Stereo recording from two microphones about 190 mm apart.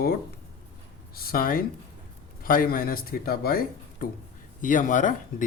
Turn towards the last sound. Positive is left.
turn(degrees=45)  # may be behind; listen again after turning